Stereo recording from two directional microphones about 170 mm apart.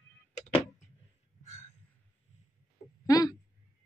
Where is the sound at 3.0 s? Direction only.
20° left (ahead or behind).